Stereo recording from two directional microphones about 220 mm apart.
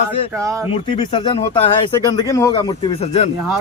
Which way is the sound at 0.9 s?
20° left (ahead or behind).